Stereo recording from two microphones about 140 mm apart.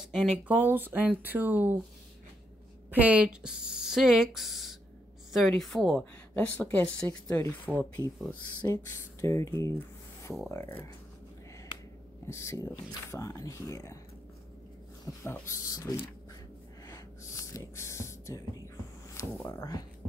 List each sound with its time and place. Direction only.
0.1 s speech: 5° left (ahead or behind)
0.4 s speech: 10° right (ahead or behind)
2.9 s speech: 10° right (ahead or behind); by 7.5 s 20° left (ahead or behind)
7.6 s speech: 10° left (ahead or behind)
8.7 s speech: 25° left (ahead or behind)
12.3 s speech: 20° left (ahead or behind)
15.3 s speech: 20° left (ahead or behind)
16.8 s gasp: 25° left (ahead or behind)
19.3 s speech: 10° left (ahead or behind)